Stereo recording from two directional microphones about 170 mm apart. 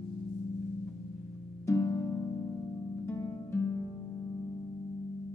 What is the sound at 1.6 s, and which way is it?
Harp, 20° left (ahead or behind).